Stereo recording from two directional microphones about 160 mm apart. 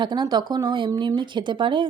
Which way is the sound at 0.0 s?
30° right (ahead or behind).